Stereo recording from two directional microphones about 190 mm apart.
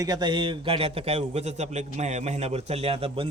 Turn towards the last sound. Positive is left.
turn(degrees=-30)  # may be behind; listen again after turning